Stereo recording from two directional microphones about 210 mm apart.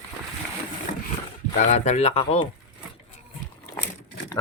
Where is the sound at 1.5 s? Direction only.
35° left (ahead or behind).